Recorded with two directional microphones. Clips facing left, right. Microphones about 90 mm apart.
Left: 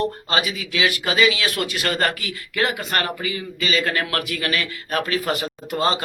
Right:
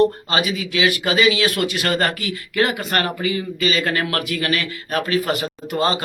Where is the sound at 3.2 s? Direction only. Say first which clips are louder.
Right 5 dB; 35° right (ahead or behind).